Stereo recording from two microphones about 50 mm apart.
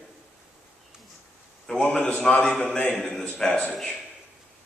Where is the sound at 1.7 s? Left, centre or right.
Centre.